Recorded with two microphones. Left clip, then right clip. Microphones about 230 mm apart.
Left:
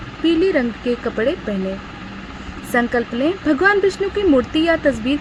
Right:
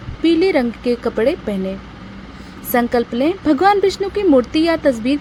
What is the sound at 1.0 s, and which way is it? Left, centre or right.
Speech, right.